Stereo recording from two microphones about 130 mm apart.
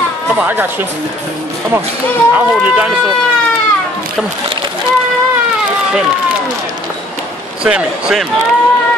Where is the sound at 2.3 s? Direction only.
10° right (ahead or behind).